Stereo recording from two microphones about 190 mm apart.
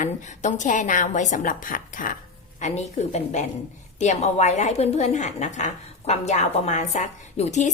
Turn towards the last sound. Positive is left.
turn(degrees=40)  # may be behind; listen again after turning